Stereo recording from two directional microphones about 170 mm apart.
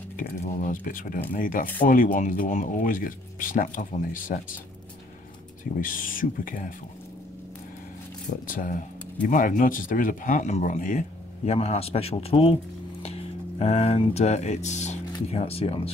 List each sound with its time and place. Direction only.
0.4 s speech: 50° left (ahead or behind)
5.6 s speech: 50° left (ahead or behind)
8.5 s speech: 55° left (ahead or behind); by 15.9 s 35° left (ahead or behind)